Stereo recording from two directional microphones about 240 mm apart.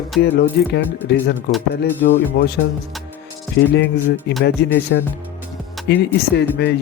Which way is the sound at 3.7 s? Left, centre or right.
Left.